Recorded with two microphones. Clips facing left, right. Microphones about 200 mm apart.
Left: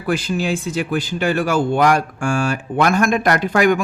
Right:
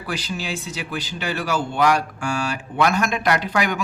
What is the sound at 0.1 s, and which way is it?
Speech, 50° left (ahead or behind).